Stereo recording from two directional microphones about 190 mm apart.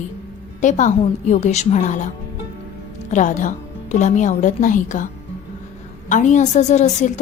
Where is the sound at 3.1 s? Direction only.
40° left (ahead or behind).